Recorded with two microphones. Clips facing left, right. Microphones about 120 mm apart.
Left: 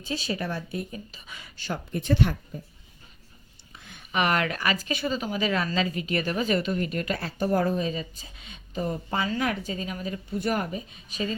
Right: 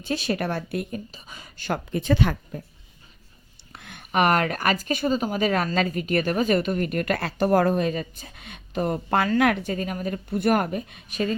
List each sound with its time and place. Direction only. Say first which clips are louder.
0.0 s speech: right 5 dB; 65° right (ahead or behind)
1.1 s speech: right 2 dB; 40° right (ahead or behind)
1.7 s speech: right 4 dB; 90° right
3.7 s speech: right 5 dB; 65° right (ahead or behind)